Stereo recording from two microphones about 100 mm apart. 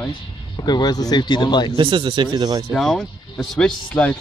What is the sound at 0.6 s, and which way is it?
Speech, 45° left (ahead or behind).